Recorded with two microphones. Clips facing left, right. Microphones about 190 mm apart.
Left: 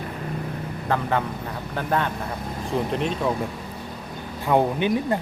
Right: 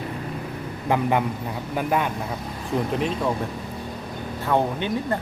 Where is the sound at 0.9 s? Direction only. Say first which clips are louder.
Right 3 dB; 15° right (ahead or behind).